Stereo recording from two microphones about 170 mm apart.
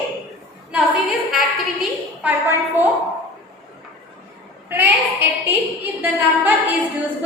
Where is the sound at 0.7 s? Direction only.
5° right (ahead or behind).